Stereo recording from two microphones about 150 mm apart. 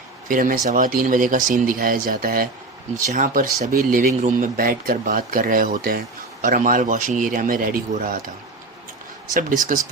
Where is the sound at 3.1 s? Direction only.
65° right (ahead or behind).